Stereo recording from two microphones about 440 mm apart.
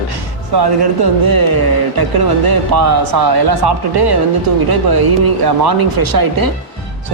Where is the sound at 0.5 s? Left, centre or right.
Right.